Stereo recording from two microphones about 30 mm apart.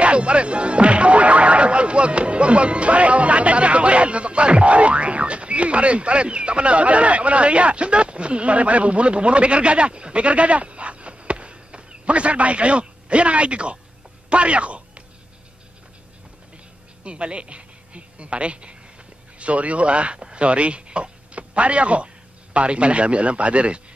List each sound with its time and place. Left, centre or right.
0.0 s speech: right
14.3 s a sound: right
17.0 s a woman's voice: right